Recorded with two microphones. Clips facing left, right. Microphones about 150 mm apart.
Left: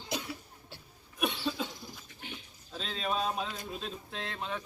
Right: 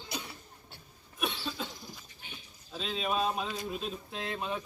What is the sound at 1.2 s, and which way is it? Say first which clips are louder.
Cough: left 3 dB; 5° left (ahead or behind).